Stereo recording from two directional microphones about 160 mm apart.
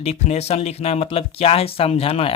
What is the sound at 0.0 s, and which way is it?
Speech, 40° left (ahead or behind).